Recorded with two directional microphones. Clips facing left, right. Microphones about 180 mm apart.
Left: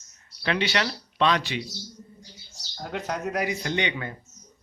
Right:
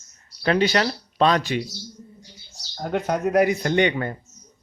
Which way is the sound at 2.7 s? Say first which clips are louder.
Right 7 dB; 50° right (ahead or behind).